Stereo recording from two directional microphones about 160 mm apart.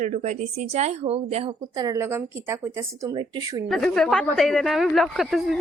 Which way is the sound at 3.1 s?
30° right (ahead or behind).